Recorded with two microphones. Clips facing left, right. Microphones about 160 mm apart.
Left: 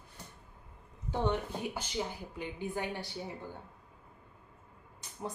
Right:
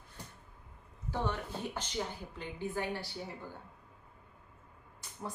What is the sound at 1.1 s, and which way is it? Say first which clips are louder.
Speech: left 4 dB; 20° left (ahead or behind).